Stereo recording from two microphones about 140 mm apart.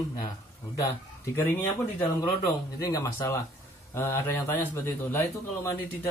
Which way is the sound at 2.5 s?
25° left (ahead or behind).